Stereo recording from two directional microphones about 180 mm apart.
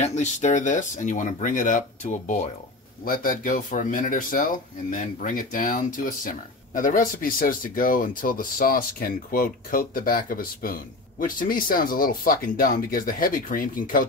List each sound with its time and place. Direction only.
0.0 s speech: 40° left (ahead or behind)